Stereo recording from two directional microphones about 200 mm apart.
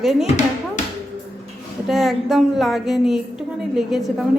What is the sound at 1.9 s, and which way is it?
A woman's voice, centre (ahead or behind).